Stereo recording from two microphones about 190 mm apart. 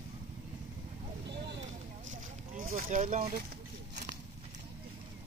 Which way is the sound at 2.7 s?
45° right (ahead or behind).